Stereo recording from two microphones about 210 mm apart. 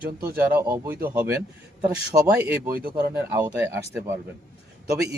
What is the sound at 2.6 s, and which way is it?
Speech, 45° right (ahead or behind).